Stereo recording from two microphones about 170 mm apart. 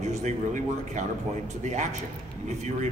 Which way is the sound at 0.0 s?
40° right (ahead or behind).